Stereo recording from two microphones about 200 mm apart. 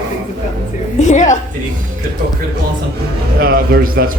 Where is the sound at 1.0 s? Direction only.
35° left (ahead or behind).